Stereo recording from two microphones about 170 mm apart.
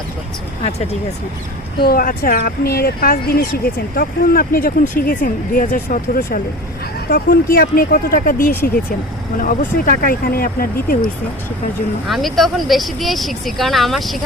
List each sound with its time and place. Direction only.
1.9 s speech: 55° left (ahead or behind)
12.0 s speech: centre (ahead or behind)